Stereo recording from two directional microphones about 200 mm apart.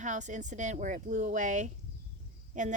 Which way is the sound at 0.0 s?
35° right (ahead or behind).